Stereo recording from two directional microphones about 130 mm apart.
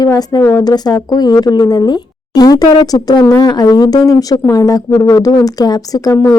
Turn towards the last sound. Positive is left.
turn(degrees=30)  # may be behind; listen again after turning